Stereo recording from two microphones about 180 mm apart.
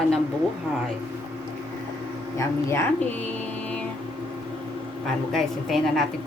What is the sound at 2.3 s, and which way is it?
Speech, 15° left (ahead or behind).